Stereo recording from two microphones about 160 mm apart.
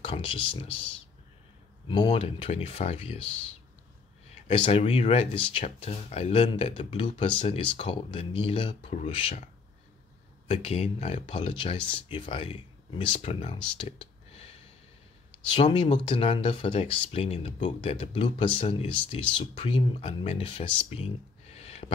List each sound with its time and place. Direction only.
0.0 s speech: 35° left (ahead or behind)
10.5 s speech: 40° left (ahead or behind)